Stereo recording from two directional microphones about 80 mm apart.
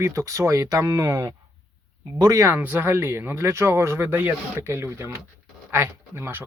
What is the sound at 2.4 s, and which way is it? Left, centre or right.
Speech, right.